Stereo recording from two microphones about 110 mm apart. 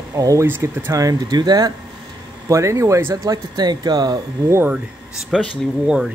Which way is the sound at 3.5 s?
40° right (ahead or behind).